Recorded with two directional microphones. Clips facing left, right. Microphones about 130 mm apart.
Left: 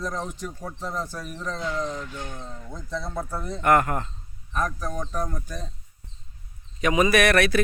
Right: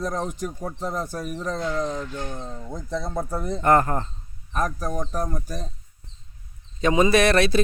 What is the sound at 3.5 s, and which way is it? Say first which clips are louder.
Speech: right 1 dB; 30° right (ahead or behind).